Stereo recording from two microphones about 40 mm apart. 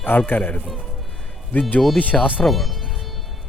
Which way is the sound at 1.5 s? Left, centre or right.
Left.